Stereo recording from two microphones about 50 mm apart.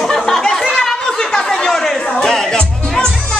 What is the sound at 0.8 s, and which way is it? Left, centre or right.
Chatter, centre.